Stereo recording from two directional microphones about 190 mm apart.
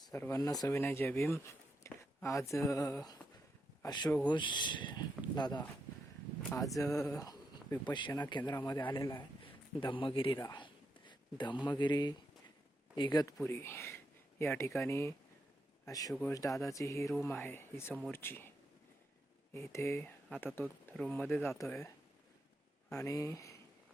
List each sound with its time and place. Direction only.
0.1 s a man's voice: 15° left (ahead or behind)
10.4 s a sound: 25° left (ahead or behind)
13.0 s speech: 20° left (ahead or behind)
19.5 s speech: 15° left (ahead or behind)